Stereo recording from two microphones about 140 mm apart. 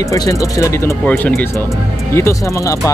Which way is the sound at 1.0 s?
10° left (ahead or behind).